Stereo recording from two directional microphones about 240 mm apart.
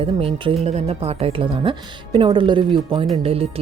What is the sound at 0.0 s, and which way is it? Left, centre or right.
Speech, right.